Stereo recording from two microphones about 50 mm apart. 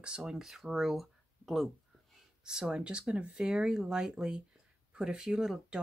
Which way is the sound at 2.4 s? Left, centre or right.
Centre.